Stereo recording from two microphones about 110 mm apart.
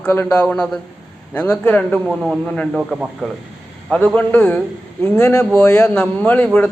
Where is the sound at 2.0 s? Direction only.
5° right (ahead or behind).